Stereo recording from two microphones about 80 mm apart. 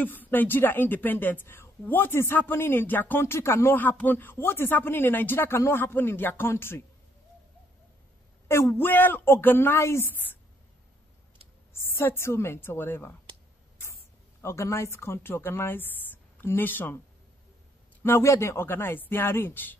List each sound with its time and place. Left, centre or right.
0.0 s a woman's voice: left
8.5 s a woman's voice: left
11.7 s a woman's voice: left
14.4 s a woman's voice: left
18.0 s a woman's voice: left